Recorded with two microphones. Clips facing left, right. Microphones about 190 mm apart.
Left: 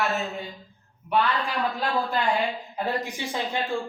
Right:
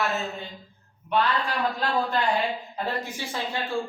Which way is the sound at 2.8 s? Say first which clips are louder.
Left 3 dB; 15° left (ahead or behind).